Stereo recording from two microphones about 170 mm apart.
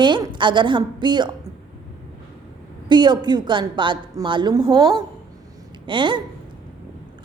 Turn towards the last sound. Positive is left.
turn(degrees=-30)  # may be behind; listen again after turning